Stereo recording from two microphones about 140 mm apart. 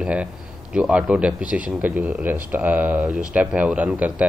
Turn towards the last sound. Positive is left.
turn(degrees=-10)  # may be behind; listen again after turning